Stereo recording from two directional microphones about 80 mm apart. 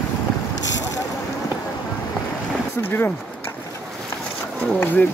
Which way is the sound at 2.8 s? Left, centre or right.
Left.